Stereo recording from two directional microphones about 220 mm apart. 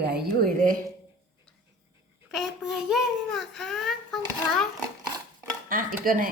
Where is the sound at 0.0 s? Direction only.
45° right (ahead or behind).